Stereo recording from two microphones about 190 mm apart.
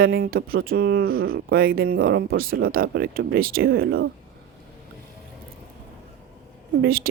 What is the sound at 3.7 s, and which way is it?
Speech, 90° right.